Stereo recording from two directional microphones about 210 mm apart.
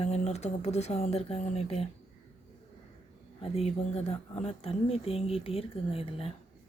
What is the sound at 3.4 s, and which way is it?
Speech, 30° left (ahead or behind).